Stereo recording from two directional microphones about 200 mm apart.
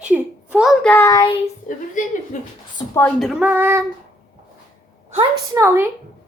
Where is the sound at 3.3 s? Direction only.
10° right (ahead or behind).